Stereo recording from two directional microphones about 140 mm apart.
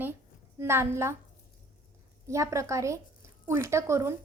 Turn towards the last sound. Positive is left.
turn(degrees=-20)  # may be behind; listen again after turning